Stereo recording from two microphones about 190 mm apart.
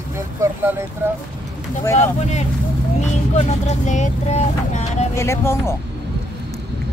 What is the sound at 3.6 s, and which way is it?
Speech, 40° left (ahead or behind).